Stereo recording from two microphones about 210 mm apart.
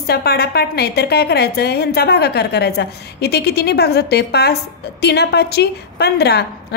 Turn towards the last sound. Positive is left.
turn(degrees=50)  # may be behind; listen again after turning